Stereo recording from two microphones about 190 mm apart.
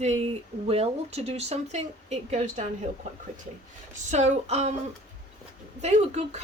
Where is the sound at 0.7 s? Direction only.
35° right (ahead or behind).